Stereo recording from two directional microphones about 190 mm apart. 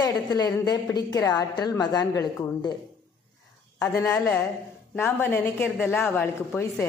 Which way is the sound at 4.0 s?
10° left (ahead or behind).